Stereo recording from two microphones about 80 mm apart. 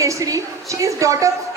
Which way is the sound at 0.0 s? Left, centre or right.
Right.